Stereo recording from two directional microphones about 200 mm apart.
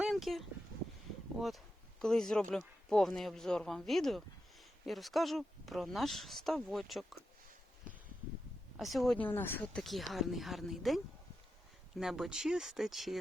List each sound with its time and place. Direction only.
0.0 s dog: centre (ahead or behind)
1.4 s speech: centre (ahead or behind)
8.8 s speech: centre (ahead or behind)